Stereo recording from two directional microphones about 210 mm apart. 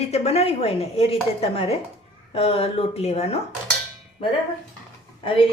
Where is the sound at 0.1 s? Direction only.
30° left (ahead or behind).